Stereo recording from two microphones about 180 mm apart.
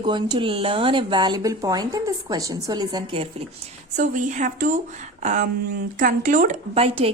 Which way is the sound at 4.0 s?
45° right (ahead or behind).